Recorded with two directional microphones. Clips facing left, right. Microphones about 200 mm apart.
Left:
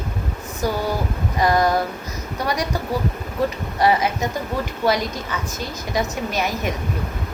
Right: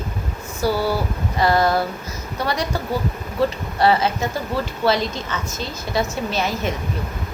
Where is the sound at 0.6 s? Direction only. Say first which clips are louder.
Right 2 dB; 15° left (ahead or behind).